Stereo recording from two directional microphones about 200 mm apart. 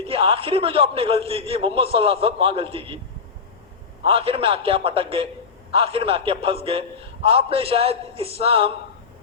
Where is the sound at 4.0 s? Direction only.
30° right (ahead or behind).